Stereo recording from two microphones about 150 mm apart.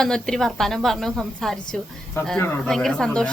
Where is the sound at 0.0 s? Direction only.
5° left (ahead or behind).